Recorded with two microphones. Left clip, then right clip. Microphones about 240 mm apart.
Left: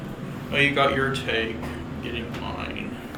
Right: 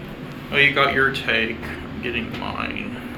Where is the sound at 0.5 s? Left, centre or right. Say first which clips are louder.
Right 4 dB; centre.